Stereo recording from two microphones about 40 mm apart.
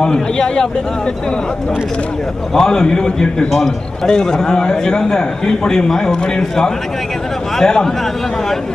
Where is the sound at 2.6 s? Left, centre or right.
Centre.